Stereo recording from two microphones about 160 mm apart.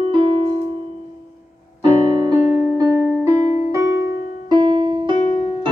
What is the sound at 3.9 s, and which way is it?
Music, 90° left.